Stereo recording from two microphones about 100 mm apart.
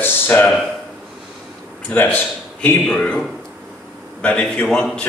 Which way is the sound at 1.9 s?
20° left (ahead or behind).